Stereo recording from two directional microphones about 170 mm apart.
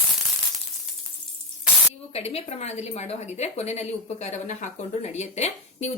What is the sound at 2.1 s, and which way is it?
A woman's voice, 35° left (ahead or behind).